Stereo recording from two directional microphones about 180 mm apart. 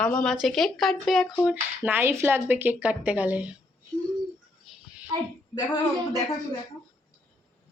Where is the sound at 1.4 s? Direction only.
10° right (ahead or behind).